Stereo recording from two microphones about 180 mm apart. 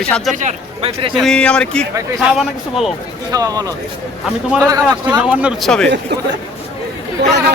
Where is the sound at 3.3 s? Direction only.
20° right (ahead or behind).